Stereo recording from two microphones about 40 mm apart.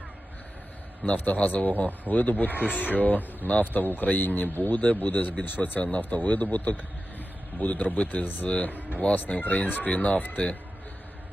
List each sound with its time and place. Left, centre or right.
1.1 s speech: left
4.7 s speech: left
8.4 s speech: left